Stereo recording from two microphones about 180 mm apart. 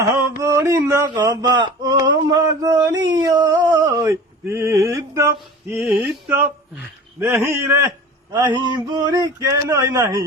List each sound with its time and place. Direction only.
0.2 s a sound: 15° right (ahead or behind)
3.1 s male singing: 20° right (ahead or behind)
5.8 s a man's voice: 10° right (ahead or behind)